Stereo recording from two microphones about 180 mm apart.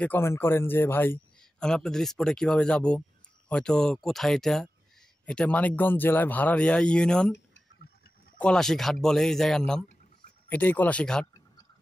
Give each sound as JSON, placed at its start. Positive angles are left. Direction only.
{"t": 0.0, "sound": "a man's voice", "side_deg": 10}
{"t": 7.3, "sound": "a sound", "side_deg": 75}
{"t": 8.4, "sound": "a man's voice", "side_deg": 5}